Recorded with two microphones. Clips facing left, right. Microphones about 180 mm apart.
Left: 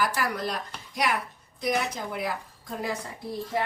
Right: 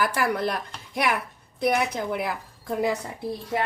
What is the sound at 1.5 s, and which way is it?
Speech, 60° right (ahead or behind).